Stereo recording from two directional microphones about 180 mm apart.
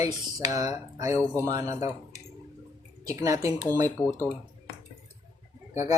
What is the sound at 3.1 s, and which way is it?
Speech, 20° right (ahead or behind).